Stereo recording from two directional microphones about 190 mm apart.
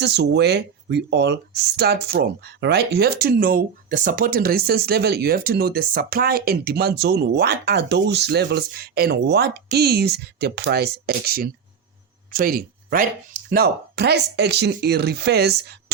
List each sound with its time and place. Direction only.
0.0 s speech: 60° right (ahead or behind)